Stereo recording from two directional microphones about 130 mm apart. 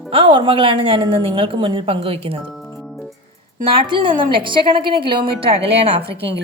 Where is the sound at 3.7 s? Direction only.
40° right (ahead or behind).